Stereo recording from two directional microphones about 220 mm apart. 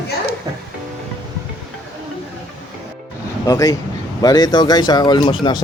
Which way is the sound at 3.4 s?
15° left (ahead or behind).